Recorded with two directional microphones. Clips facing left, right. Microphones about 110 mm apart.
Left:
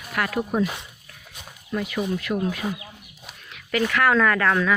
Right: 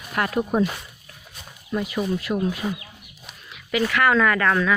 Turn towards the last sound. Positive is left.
turn(degrees=0)  # may be behind; listen again after turning